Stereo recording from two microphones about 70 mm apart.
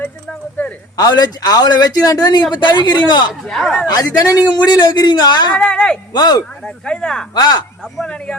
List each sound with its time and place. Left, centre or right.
0.9 s speech: left
3.4 s speech: centre
3.8 s speech: left
5.5 s speech: centre
6.1 s speech: left
6.7 s speech: centre
7.3 s speech: left
8.0 s speech: centre